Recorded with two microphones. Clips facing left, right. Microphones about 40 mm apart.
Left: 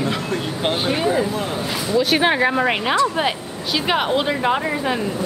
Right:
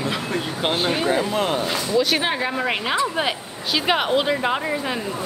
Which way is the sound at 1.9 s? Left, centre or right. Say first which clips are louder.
Left 2 dB; centre.